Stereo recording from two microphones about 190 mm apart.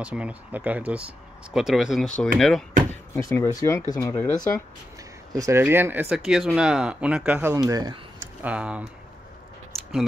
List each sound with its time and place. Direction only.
0.0 s speech: 5° right (ahead or behind)
3.2 s speech: 15° left (ahead or behind)
5.3 s speech: 15° right (ahead or behind)
7.5 s speech: 20° right (ahead or behind)
8.5 s speech: 5° right (ahead or behind)
9.8 s a sound: centre (ahead or behind)